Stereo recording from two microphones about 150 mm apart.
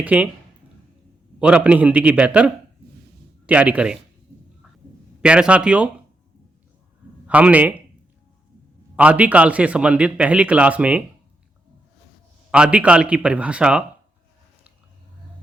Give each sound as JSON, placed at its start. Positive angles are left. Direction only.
{"t": 0.0, "sound": "a man's voice", "side_deg": -10}
{"t": 1.4, "sound": "a man's voice", "side_deg": -10}
{"t": 5.2, "sound": "a man's voice", "side_deg": -5}
{"t": 7.3, "sound": "a man's voice", "side_deg": -10}
{"t": 9.0, "sound": "a man's voice", "side_deg": -10}
{"t": 12.5, "sound": "a man's voice", "side_deg": -5}